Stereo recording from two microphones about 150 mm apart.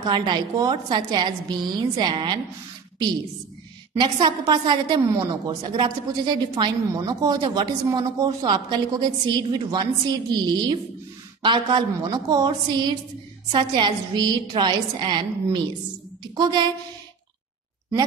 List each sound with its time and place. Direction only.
0.0 s a woman's voice: 30° right (ahead or behind)
4.0 s a woman's voice: 30° right (ahead or behind)